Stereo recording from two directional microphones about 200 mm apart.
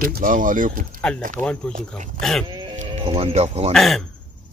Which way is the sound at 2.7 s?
30° right (ahead or behind).